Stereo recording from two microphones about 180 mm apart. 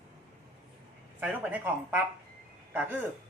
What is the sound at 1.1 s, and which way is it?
Speech, 10° right (ahead or behind).